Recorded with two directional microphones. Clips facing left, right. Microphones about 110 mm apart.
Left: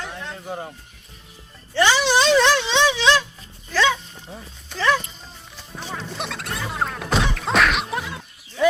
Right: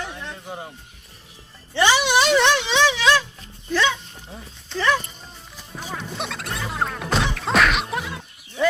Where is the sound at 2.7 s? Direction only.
25° left (ahead or behind).